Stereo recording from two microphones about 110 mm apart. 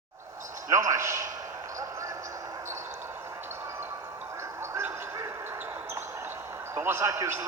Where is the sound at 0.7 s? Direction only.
30° right (ahead or behind).